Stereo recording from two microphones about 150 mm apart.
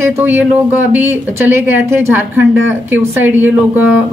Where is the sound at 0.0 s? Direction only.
15° right (ahead or behind).